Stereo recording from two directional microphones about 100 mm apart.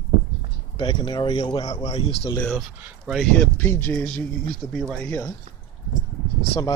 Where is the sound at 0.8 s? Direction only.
45° left (ahead or behind).